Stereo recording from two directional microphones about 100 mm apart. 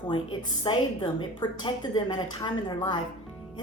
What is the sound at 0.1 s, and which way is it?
A woman's voice, 55° left (ahead or behind).